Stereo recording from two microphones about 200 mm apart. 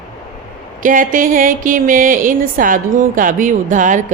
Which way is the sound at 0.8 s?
45° right (ahead or behind).